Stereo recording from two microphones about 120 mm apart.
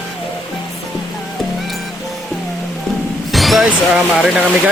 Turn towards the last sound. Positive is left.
turn(degrees=-5)  # may be behind; listen again after turning